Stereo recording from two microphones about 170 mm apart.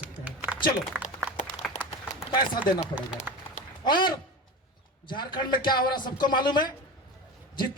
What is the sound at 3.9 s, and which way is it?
A man's voice, 25° left (ahead or behind).